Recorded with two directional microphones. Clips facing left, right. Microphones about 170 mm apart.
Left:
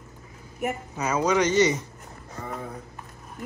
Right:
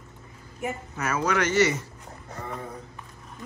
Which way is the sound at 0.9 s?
15° left (ahead or behind).